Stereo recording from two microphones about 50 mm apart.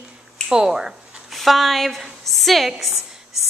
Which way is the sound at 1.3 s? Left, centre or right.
Centre.